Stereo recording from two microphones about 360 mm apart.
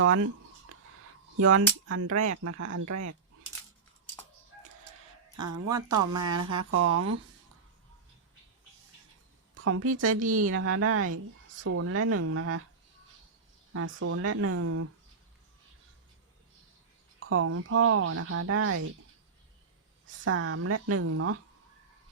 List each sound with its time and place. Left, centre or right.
0.0 s speech: right
6.0 s speech: centre
6.7 s speech: right
9.6 s speech: right
13.7 s speech: right
17.2 s speech: right
20.1 s speech: right